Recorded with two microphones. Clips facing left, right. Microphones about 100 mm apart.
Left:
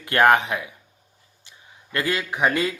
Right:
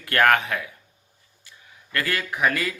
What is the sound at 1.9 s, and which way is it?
Speech, 20° left (ahead or behind).